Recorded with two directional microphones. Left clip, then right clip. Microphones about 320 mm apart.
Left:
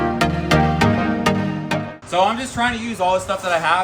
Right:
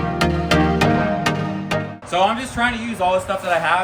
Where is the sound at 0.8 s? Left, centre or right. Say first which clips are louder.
Right 1 dB; left.